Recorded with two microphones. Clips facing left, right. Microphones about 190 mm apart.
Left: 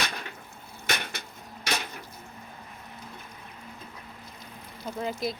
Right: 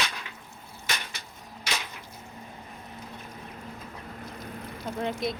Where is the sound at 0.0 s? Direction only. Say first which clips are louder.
Left 1 dB; 50° left (ahead or behind).